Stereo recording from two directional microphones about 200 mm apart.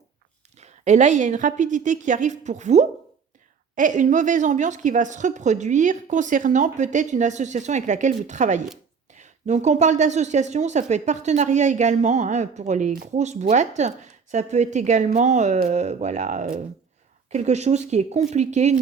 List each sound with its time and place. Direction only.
0.6 s a woman's voice: 35° right (ahead or behind)